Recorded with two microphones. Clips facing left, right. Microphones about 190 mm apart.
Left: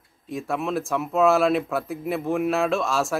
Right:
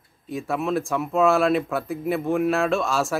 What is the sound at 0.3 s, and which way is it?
Speech, centre (ahead or behind).